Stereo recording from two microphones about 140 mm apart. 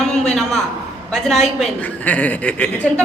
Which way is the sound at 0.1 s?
5° left (ahead or behind).